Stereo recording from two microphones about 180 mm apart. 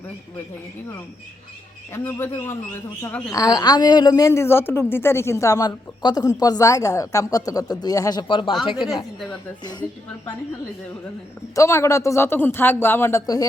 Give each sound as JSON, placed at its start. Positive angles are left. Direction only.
{"t": 1.9, "sound": "a man's voice", "side_deg": 15}
{"t": 11.5, "sound": "a man's voice", "side_deg": 15}